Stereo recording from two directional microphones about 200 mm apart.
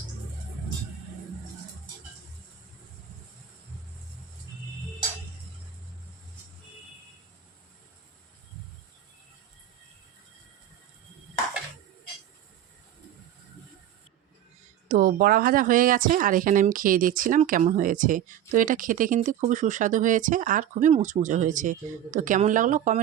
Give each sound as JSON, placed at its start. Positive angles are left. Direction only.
{"t": 14.8, "sound": "speech", "side_deg": -45}